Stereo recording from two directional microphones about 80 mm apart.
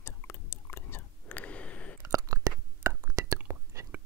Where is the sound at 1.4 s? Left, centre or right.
Centre.